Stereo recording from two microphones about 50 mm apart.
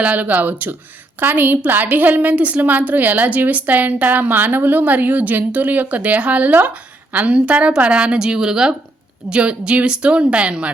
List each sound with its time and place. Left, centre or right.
0.0 s a woman's voice: right